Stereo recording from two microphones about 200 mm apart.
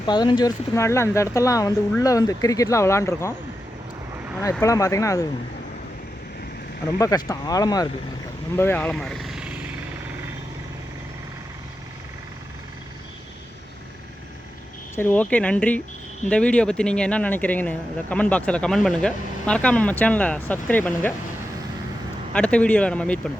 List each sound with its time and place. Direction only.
0.0 s speech: 20° left (ahead or behind)
4.6 s speech: 15° left (ahead or behind)
7.0 s speech: 20° left (ahead or behind); by 9.6 s 5° right (ahead or behind)
14.9 s speech: 10° left (ahead or behind)
22.3 s speech: 5° left (ahead or behind)